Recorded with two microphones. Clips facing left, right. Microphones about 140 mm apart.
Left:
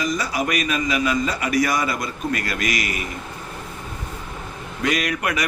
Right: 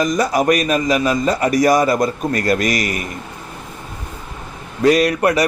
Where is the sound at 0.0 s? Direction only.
45° right (ahead or behind).